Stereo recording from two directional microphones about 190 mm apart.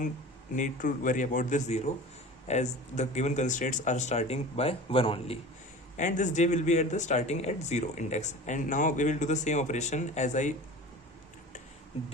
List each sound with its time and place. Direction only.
0.5 s speech: 45° left (ahead or behind)
6.0 s speech: 40° left (ahead or behind)